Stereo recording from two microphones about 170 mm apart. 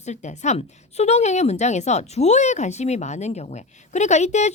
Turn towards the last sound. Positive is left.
turn(degrees=40)  # may be behind; listen again after turning